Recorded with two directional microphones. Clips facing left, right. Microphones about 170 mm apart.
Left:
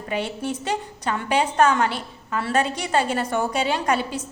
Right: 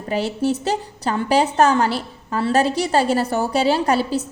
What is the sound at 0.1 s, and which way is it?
A woman's voice, 35° right (ahead or behind).